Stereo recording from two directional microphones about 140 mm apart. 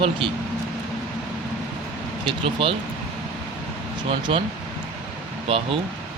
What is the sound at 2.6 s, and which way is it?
Speech, 40° right (ahead or behind).